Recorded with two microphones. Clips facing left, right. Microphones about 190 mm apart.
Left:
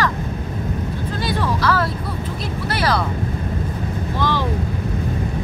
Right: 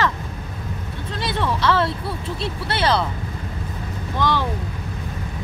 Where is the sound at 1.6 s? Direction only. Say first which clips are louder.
Even; 25° right (ahead or behind).